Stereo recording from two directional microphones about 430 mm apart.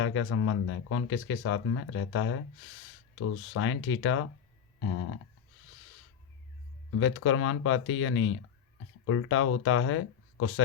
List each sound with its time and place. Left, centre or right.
0.0 s speech: left
7.0 s speech: left